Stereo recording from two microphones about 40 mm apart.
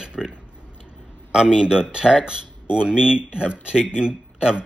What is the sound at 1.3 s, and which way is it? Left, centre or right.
Speech, centre.